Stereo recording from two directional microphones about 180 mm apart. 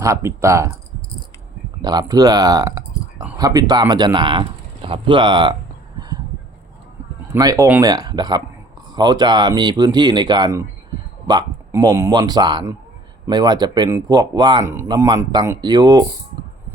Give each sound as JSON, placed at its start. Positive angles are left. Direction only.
{"t": 0.0, "sound": "speech", "side_deg": -15}
{"t": 1.8, "sound": "speech", "side_deg": -20}
{"t": 7.3, "sound": "speech", "side_deg": -20}